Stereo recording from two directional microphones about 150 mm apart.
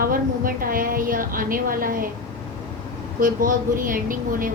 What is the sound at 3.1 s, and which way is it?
A woman's voice, 65° right (ahead or behind).